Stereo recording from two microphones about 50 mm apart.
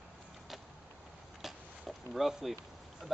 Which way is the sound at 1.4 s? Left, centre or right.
Centre.